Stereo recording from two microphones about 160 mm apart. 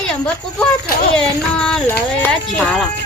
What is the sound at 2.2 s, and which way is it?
Speech, 10° left (ahead or behind).